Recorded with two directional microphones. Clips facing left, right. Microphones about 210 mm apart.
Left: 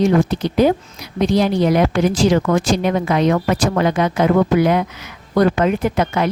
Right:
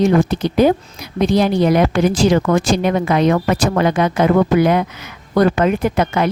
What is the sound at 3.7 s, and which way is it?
Speech, 55° right (ahead or behind).